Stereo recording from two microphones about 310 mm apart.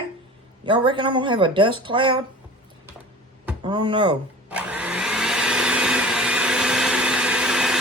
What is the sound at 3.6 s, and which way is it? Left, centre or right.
Speech, centre.